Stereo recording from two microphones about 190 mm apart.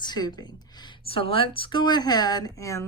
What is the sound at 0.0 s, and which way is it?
A woman's voice, 20° left (ahead or behind).